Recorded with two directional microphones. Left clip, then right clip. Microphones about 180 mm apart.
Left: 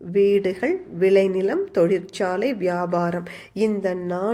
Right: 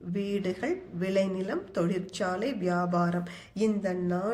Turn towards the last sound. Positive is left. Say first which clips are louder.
# left 6 dB
turn(degrees=30)  # may be behind; listen again after turning